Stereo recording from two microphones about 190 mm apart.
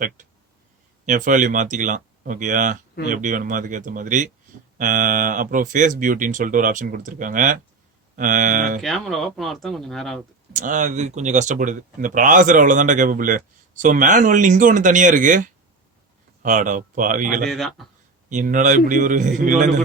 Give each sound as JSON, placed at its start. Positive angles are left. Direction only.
{"t": 1.0, "sound": "speech", "side_deg": -40}
{"t": 8.8, "sound": "speech", "side_deg": 0}
{"t": 10.5, "sound": "speech", "side_deg": -45}
{"t": 17.5, "sound": "speech", "side_deg": 0}
{"t": 18.3, "sound": "speech", "side_deg": -40}